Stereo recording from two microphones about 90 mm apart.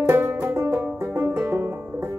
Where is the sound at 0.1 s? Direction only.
25° right (ahead or behind).